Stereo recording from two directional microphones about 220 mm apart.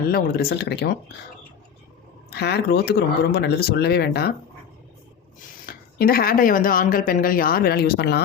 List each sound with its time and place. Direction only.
0.1 s speech: 45° left (ahead or behind)
2.3 s speech: 45° left (ahead or behind)
5.6 s speech: 40° left (ahead or behind)